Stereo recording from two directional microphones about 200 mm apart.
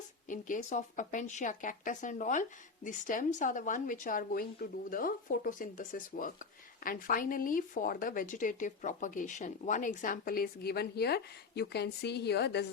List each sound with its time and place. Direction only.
0.3 s speech: 40° left (ahead or behind); by 12.6 s 55° left (ahead or behind)